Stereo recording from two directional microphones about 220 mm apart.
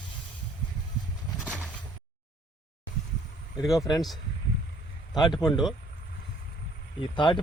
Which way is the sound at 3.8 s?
15° left (ahead or behind).